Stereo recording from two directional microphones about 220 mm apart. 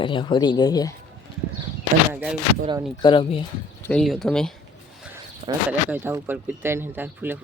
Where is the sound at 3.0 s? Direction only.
20° left (ahead or behind).